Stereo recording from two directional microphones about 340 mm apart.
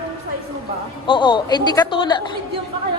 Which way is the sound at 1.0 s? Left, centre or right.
Centre.